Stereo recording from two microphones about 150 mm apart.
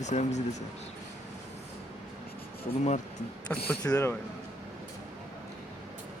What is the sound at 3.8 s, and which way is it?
Speech, 20° left (ahead or behind).